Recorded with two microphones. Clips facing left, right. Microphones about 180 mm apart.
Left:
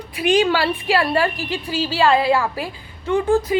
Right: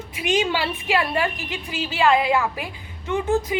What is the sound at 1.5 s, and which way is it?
Speech, 35° left (ahead or behind).